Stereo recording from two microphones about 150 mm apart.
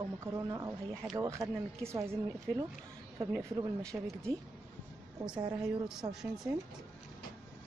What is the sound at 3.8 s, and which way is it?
Speech, 5° left (ahead or behind).